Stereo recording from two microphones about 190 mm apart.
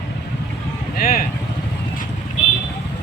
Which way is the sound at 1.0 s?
50° left (ahead or behind).